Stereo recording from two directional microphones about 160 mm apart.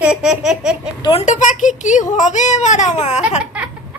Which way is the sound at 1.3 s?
50° left (ahead or behind).